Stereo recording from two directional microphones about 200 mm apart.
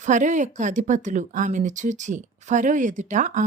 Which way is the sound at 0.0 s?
40° right (ahead or behind).